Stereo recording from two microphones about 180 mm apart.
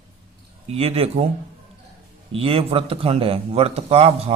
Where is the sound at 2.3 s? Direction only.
30° right (ahead or behind).